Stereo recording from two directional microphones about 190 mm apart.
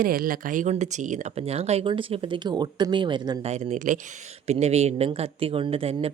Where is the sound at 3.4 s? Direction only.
35° right (ahead or behind).